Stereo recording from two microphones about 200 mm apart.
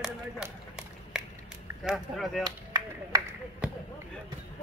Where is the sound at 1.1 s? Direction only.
5° right (ahead or behind).